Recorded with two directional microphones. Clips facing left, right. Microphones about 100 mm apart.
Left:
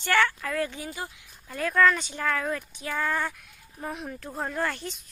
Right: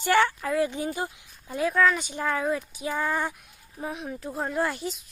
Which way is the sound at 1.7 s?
5° right (ahead or behind).